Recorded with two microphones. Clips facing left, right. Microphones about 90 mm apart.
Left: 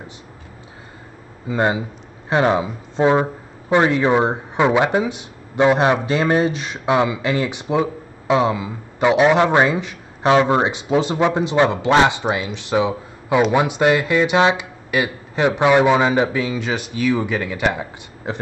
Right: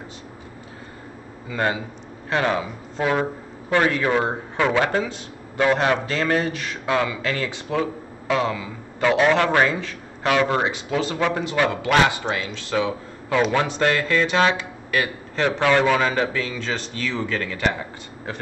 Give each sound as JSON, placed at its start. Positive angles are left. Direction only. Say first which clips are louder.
{"t": 1.5, "sound": "speech", "louder": "left 5 dB", "side_deg": 20}